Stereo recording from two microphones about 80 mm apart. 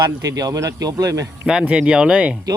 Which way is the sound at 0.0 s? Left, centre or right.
Right.